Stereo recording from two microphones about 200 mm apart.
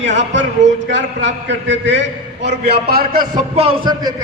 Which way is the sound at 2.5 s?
50° right (ahead or behind).